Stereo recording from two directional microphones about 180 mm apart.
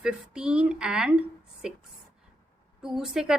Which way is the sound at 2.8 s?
Centre (ahead or behind).